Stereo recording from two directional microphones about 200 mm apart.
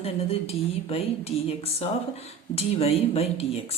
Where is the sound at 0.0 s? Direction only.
30° left (ahead or behind).